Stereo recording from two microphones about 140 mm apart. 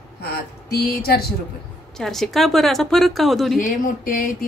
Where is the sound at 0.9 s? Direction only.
90° left.